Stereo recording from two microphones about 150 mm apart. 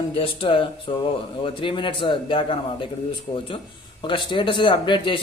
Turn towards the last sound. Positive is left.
turn(degrees=35)  # may be behind; listen again after turning